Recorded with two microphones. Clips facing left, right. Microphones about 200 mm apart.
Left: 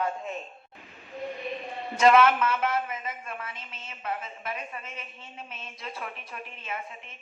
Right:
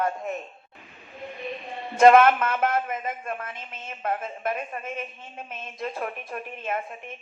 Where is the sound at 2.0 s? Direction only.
50° right (ahead or behind).